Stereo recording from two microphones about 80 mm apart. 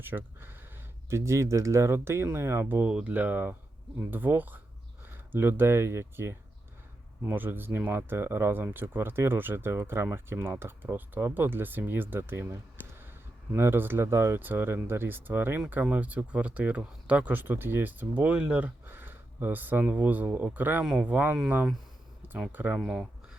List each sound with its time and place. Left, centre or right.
0.0 s speech: right
1.1 s speech: right
20.8 s speech: centre
21.1 s speech: centre
22.5 s speech: right
22.8 s speech: centre